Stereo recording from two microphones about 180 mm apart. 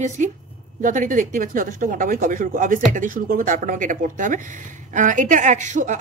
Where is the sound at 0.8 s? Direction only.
45° right (ahead or behind).